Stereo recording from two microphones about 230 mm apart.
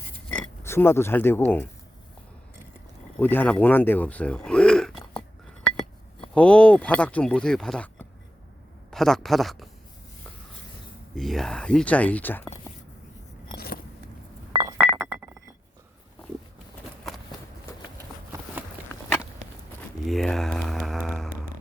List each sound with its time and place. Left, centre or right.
0.3 s oink: centre
3.2 s speech: centre
6.3 s speech: centre
11.1 s speech: centre
14.5 s chink: right
20.1 s a sound: centre